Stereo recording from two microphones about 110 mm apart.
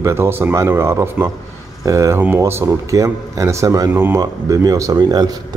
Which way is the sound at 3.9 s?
20° right (ahead or behind).